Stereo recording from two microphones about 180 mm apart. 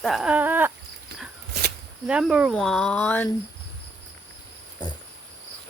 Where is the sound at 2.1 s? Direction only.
5° right (ahead or behind); by 3.3 s 10° left (ahead or behind).